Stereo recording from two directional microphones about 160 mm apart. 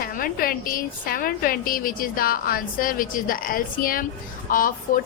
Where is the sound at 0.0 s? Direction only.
65° left (ahead or behind).